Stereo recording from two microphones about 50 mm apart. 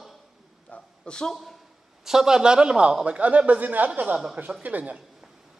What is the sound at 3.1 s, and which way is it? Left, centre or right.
A man's voice, right.